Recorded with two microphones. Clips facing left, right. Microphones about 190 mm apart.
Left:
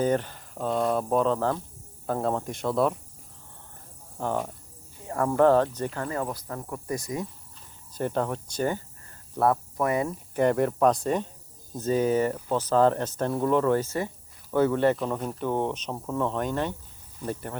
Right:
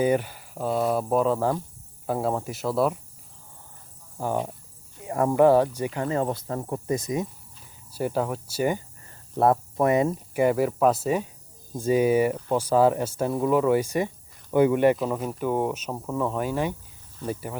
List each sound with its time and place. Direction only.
0.0 s speech: 10° right (ahead or behind)
4.2 s speech: 10° right (ahead or behind)
7.9 s speech: 5° right (ahead or behind)
9.4 s speech: 25° right (ahead or behind)
10.3 s speech: 5° right (ahead or behind)